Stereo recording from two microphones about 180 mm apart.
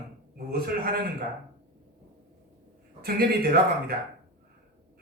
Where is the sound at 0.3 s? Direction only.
55° right (ahead or behind).